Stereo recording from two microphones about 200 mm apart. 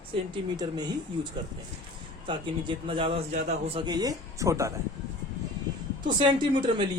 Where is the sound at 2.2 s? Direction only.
25° right (ahead or behind).